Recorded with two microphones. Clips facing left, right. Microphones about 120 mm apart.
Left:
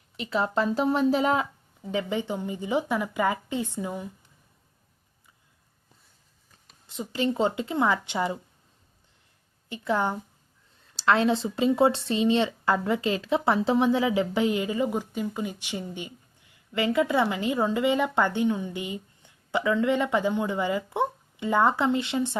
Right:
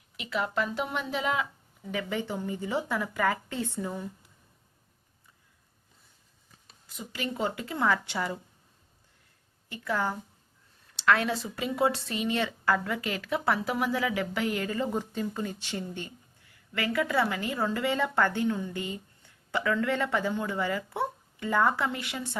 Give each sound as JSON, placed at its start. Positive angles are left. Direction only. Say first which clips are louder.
{"t": 0.2, "sound": "speech", "louder": "left 4 dB", "side_deg": 30}
{"t": 1.9, "sound": "a woman's voice", "louder": "left 4 dB", "side_deg": 20}
{"t": 6.8, "sound": "speech", "louder": "left 8 dB", "side_deg": 30}
{"t": 9.6, "sound": "speech", "louder": "left 4 dB", "side_deg": 20}